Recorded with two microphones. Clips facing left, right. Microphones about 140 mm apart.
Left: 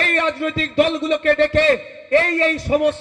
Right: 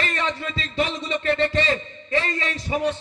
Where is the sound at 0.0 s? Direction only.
55° left (ahead or behind).